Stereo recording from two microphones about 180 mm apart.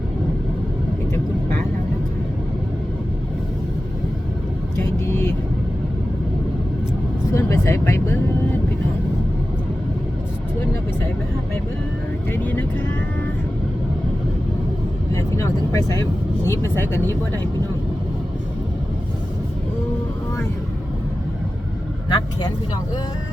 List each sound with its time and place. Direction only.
4.8 s vehicle: 15° left (ahead or behind)
7.3 s speech: 15° left (ahead or behind)
12.3 s speech: 10° left (ahead or behind)
15.1 s speech: 15° left (ahead or behind)
22.1 s speech: 25° left (ahead or behind)